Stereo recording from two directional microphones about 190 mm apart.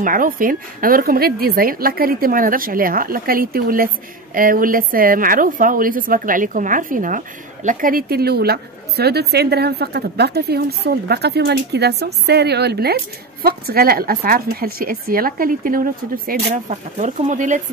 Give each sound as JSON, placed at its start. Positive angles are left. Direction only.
{"t": 0.0, "sound": "a woman's voice", "side_deg": -45}